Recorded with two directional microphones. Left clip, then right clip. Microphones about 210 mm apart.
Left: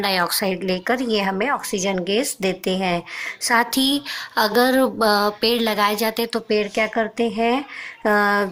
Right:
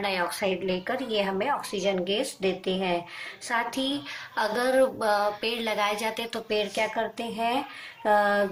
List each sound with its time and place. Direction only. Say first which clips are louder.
0.0 s speech: left 7 dB; 50° left (ahead or behind)